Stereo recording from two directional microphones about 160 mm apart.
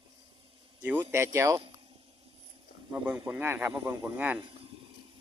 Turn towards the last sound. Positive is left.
turn(degrees=-10)  # may be behind; listen again after turning